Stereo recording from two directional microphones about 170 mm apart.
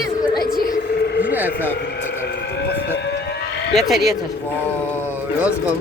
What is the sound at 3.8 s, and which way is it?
Speech, centre (ahead or behind).